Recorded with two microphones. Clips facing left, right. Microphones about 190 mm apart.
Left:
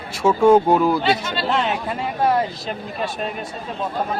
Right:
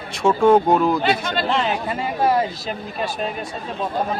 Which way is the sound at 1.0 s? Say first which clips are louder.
Even; 50° right (ahead or behind).